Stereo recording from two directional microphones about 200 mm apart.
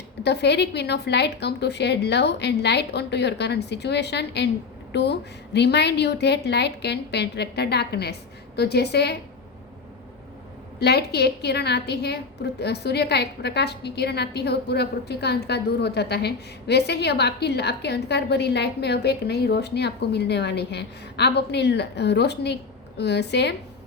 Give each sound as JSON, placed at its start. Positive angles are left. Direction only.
{"t": 0.2, "sound": "a woman's voice", "side_deg": 55}
{"t": 10.8, "sound": "a woman's voice", "side_deg": 55}